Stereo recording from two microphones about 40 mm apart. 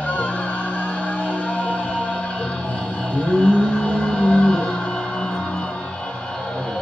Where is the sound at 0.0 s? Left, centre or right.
Left.